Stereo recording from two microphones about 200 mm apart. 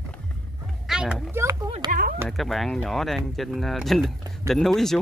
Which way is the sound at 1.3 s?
15° right (ahead or behind).